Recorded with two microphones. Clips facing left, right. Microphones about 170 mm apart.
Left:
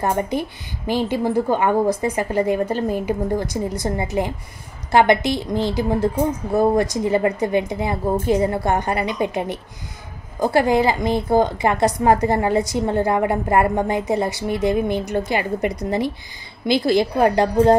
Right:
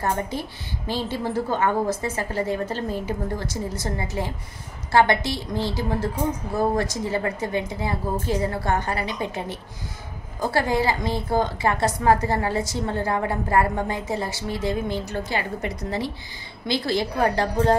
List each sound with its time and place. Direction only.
0.0 s a woman's voice: 15° left (ahead or behind)
4.9 s a woman's voice: 15° left (ahead or behind)